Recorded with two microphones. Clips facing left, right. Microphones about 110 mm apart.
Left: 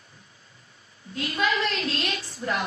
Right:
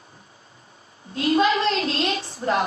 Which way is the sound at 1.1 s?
35° right (ahead or behind).